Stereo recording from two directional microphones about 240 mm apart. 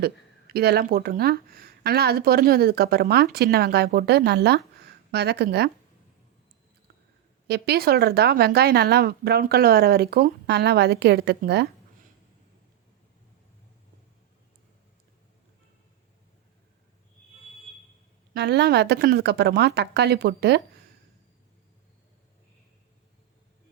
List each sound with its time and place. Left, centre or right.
0.0 s speech: right
7.4 s speech: right
18.3 s speech: right